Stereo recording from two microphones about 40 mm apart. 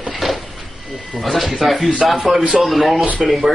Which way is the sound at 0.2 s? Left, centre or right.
Centre.